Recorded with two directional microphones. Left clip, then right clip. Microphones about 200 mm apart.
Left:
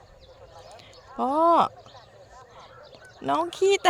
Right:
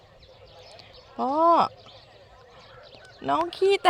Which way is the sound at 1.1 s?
5° left (ahead or behind).